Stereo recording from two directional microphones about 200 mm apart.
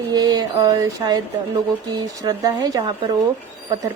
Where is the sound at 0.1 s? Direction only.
20° right (ahead or behind).